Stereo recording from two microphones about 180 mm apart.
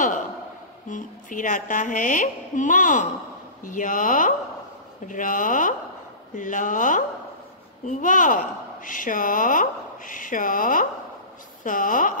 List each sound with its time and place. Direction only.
0.8 s a woman's voice: 45° left (ahead or behind)